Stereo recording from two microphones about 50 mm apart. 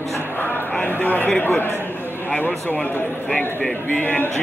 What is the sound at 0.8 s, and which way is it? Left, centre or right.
A man's voice, left.